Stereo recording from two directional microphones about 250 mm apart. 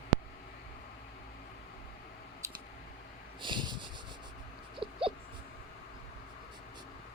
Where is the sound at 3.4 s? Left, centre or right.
Centre.